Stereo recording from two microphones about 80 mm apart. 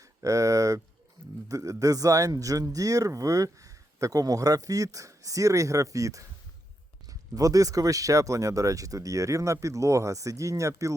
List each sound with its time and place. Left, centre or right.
0.2 s speech: right